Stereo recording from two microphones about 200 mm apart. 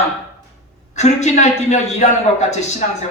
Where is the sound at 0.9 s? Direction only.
35° left (ahead or behind).